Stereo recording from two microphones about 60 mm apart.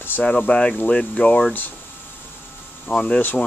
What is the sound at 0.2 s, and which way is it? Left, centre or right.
Speech, left.